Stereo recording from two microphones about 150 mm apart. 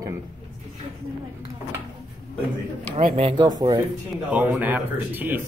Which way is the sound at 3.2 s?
40° right (ahead or behind).